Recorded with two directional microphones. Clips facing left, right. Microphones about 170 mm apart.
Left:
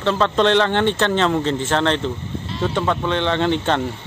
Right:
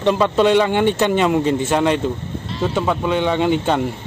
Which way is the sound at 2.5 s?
Centre (ahead or behind).